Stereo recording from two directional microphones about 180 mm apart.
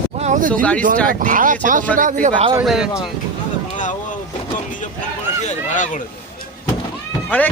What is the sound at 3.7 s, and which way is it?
Boat, 45° left (ahead or behind).